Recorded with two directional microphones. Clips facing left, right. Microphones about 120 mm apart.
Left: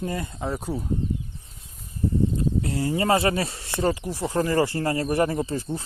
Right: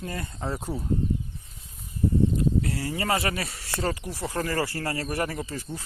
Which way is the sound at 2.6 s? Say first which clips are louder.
Left 5 dB; 25° left (ahead or behind).